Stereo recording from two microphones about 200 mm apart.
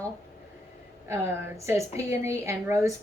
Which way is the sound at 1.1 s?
15° right (ahead or behind).